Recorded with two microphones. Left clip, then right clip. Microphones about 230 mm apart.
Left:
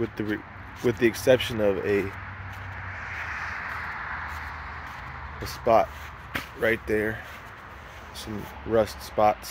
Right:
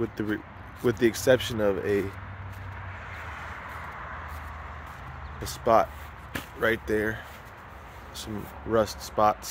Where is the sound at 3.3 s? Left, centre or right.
Right.